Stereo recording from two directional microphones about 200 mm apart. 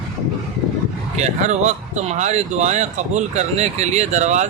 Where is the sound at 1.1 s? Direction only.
35° right (ahead or behind).